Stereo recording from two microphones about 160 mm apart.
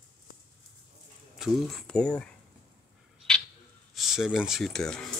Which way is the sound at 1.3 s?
Centre (ahead or behind).